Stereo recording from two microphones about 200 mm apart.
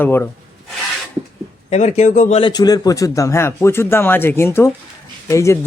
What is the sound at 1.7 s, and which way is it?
Speech, 35° left (ahead or behind).